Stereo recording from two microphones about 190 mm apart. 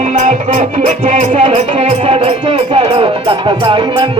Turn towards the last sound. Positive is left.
turn(degrees=-25)  # may be behind; listen again after turning